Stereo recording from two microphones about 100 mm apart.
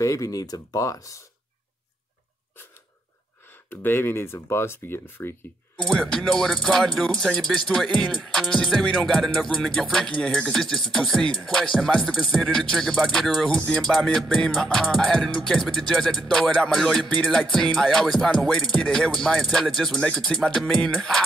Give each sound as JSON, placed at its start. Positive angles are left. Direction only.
{"t": 0.0, "sound": "speech", "side_deg": 35}
{"t": 3.8, "sound": "speech", "side_deg": 20}
{"t": 5.9, "sound": "speech", "side_deg": 5}